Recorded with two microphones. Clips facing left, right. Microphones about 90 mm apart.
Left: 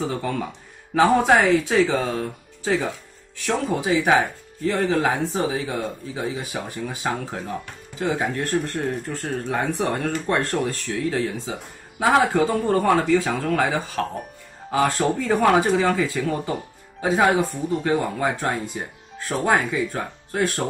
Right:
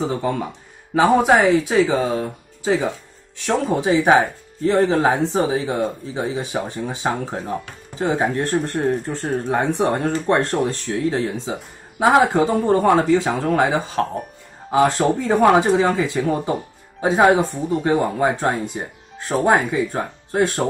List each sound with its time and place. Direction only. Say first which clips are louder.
0.0 s speech: right 4 dB; 20° right (ahead or behind)